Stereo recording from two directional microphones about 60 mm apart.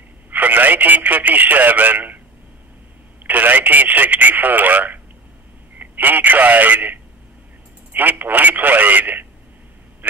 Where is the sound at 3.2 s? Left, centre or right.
Right.